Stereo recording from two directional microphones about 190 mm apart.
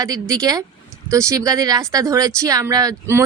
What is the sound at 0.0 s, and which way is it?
A woman's voice, 15° right (ahead or behind).